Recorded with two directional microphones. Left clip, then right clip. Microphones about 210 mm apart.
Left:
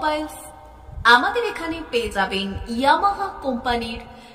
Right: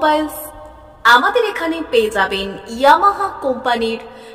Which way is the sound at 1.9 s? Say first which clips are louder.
Right 7 dB; 20° right (ahead or behind).